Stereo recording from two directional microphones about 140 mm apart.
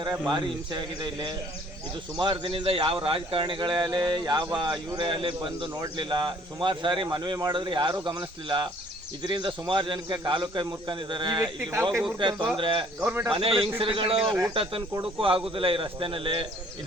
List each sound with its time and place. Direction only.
0.0 s speech: 30° right (ahead or behind)
11.4 s speech: 15° right (ahead or behind)
12.2 s speech: 35° right (ahead or behind)
13.0 s speech: 10° right (ahead or behind)
13.3 s speech: 40° right (ahead or behind)